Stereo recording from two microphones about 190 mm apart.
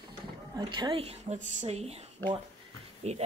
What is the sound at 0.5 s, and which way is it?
A woman's voice, 25° right (ahead or behind).